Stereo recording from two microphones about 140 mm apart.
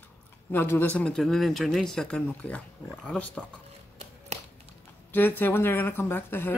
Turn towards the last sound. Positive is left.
turn(degrees=15)  # may be behind; listen again after turning